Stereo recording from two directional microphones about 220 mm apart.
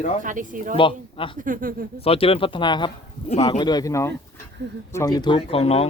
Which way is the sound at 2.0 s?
25° left (ahead or behind).